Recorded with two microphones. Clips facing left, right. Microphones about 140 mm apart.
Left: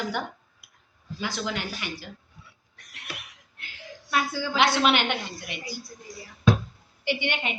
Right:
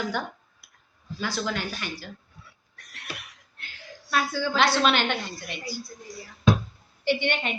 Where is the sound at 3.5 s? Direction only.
15° left (ahead or behind).